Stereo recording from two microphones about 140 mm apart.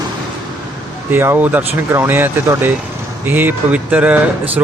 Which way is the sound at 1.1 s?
15° right (ahead or behind).